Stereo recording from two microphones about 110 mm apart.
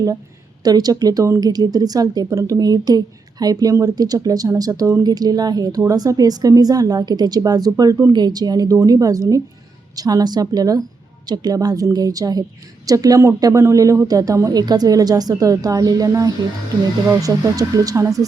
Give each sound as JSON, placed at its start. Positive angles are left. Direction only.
{"t": 0.6, "sound": "speech", "side_deg": -35}